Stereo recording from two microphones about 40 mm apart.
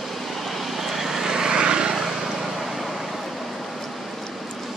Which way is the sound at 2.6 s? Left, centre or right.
Centre.